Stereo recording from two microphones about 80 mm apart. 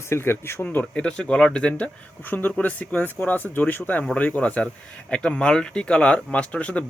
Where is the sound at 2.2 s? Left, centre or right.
Left.